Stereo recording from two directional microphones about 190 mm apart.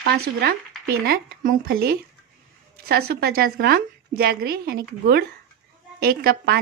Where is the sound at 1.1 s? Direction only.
50° right (ahead or behind).